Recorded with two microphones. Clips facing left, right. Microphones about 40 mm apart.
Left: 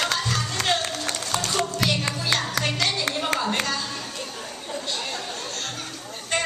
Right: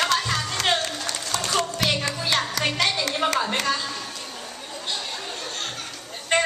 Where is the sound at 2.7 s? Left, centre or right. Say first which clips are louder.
Right 2 dB; right.